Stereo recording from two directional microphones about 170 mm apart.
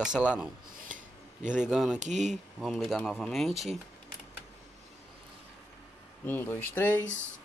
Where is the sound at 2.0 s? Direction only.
45° right (ahead or behind).